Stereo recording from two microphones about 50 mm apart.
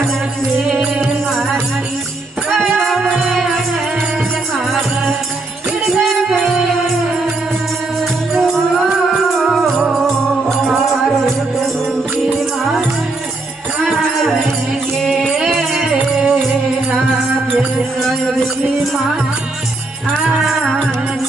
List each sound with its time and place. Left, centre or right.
2.5 s music: centre
9.4 s music: centre
15.4 s music: centre
20.4 s music: centre